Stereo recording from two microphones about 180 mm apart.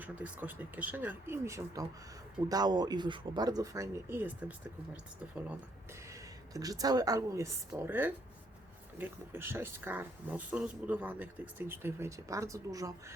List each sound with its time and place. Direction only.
0.0 s speech: 10° right (ahead or behind)
6.1 s a woman's voice: 20° right (ahead or behind)